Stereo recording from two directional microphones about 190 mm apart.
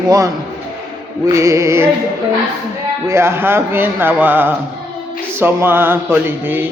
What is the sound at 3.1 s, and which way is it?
Speech, 15° right (ahead or behind).